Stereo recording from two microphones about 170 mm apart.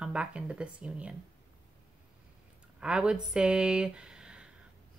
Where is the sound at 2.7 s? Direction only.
5° right (ahead or behind).